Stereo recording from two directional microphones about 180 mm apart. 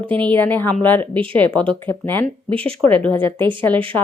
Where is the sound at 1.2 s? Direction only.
30° right (ahead or behind).